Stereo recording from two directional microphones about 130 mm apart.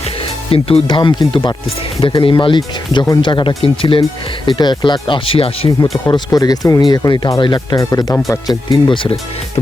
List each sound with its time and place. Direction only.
0.5 s speech: 45° left (ahead or behind)
6.1 s speech: 35° left (ahead or behind)
7.8 s speech: 25° left (ahead or behind)